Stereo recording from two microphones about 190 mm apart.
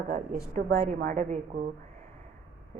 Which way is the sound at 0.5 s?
50° right (ahead or behind).